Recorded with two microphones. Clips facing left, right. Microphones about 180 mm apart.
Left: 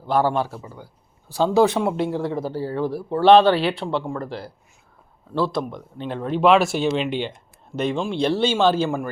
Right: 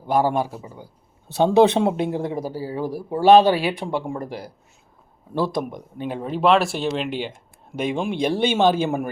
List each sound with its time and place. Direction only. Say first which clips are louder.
0.1 s speech: even; 10° right (ahead or behind)
1.3 s speech: right 2 dB; 20° right (ahead or behind)